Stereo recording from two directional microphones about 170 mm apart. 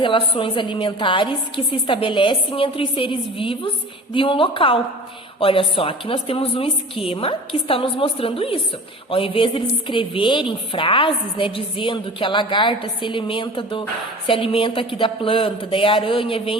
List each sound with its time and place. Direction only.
0.0 s a woman's voice: 30° left (ahead or behind)